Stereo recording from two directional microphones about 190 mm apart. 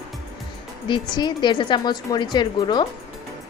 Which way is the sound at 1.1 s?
20° left (ahead or behind).